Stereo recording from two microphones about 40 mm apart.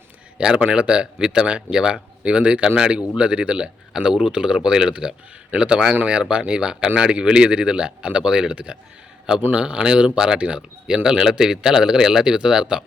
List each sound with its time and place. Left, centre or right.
0.3 s a man's voice: right